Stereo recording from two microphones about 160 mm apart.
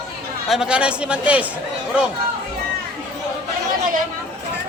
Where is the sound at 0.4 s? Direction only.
5° right (ahead or behind).